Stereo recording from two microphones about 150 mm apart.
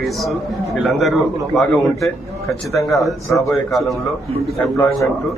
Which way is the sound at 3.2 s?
20° left (ahead or behind).